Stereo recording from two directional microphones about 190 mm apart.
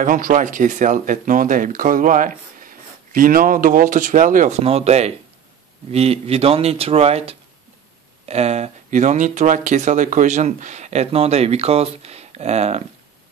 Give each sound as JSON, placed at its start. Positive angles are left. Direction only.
{"t": 0.0, "sound": "speech", "side_deg": -45}